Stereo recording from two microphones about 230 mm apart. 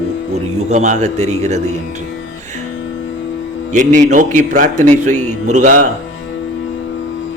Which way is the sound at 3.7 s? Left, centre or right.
Right.